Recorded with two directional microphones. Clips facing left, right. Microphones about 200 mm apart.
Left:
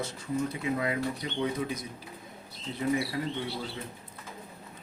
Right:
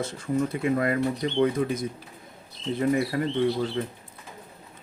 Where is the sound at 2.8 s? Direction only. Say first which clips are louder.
Right 5 dB; 55° right (ahead or behind).